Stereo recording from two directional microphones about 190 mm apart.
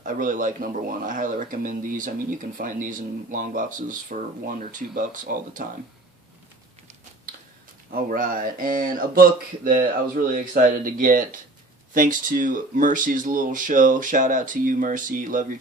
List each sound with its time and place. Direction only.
0.0 s speech: 45° right (ahead or behind)
7.9 s speech: 50° right (ahead or behind)
10.3 s speech: 45° right (ahead or behind)